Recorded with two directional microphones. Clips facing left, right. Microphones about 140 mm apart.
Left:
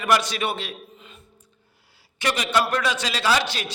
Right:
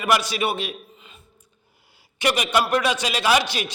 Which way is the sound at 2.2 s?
15° right (ahead or behind).